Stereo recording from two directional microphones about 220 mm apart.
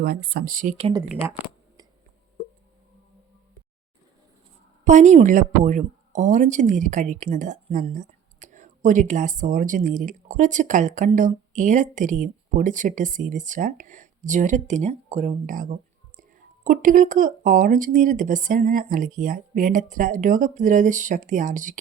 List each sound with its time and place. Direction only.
0.0 s speech: 45° right (ahead or behind)
1.0 s speech: centre (ahead or behind)
4.9 s speech: 35° right (ahead or behind)